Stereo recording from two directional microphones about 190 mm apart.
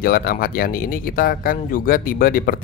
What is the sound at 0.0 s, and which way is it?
Speech, 50° left (ahead or behind).